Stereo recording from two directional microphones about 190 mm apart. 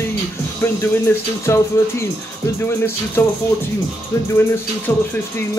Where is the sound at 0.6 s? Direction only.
10° left (ahead or behind).